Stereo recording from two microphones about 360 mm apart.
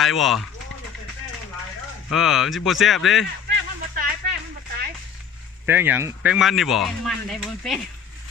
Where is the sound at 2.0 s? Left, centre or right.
Centre.